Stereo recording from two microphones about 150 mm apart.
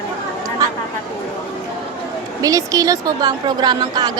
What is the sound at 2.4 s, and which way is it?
A woman's voice, 25° right (ahead or behind).